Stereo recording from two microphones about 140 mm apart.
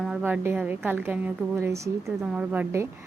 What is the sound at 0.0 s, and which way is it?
Speech, 10° right (ahead or behind).